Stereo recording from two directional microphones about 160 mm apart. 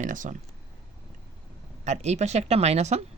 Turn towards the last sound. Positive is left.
turn(degrees=-45)  # may be behind; listen again after turning